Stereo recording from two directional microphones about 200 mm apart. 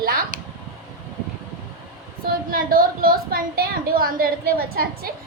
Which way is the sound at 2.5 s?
45° right (ahead or behind).